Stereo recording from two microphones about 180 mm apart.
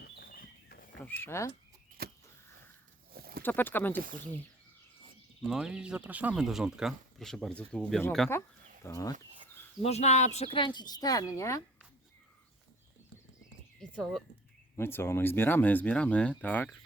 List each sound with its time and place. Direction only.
0.0 s a sound: 55° left (ahead or behind)
0.9 s speech: 10° left (ahead or behind)
2.0 s a sound: 65° right (ahead or behind)
3.4 s speech: 10° left (ahead or behind)
5.5 s speech: 5° right (ahead or behind)
8.3 s speech: 15° left (ahead or behind)
9.8 s speech: 35° left (ahead or behind); by 11.6 s 15° left (ahead or behind)
13.7 s a sound: 5° left (ahead or behind)
14.8 s speech: 15° left (ahead or behind)